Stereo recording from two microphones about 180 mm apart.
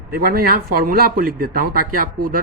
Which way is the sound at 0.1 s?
55° right (ahead or behind).